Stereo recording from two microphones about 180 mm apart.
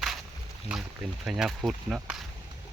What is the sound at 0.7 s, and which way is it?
Speech, 5° right (ahead or behind).